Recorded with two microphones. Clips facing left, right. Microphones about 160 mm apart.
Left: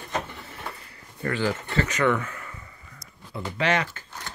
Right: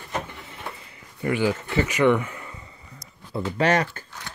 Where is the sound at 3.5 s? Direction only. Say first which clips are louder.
Right 3 dB; 40° right (ahead or behind).